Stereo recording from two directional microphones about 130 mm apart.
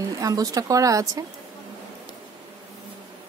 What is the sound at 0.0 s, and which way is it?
Speech, 25° right (ahead or behind).